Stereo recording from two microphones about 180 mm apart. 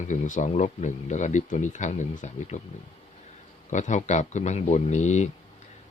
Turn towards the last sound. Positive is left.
turn(degrees=40)  # may be behind; listen again after turning